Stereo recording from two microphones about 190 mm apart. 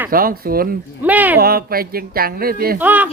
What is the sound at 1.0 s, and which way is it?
Speech, 10° right (ahead or behind).